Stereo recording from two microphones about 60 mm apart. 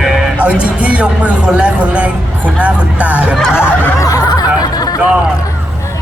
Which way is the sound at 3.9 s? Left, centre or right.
Left.